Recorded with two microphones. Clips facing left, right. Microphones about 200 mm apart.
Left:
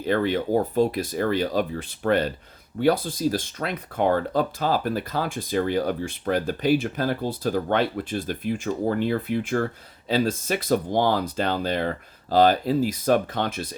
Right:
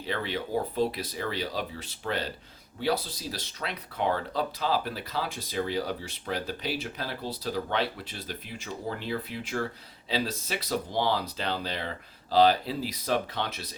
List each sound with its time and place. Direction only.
0.0 s speech: 50° left (ahead or behind)